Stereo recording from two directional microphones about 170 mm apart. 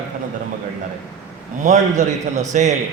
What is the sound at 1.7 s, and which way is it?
A man's voice, 45° right (ahead or behind).